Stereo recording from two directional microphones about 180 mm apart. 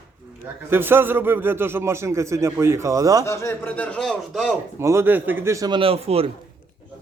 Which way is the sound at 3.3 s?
15° left (ahead or behind).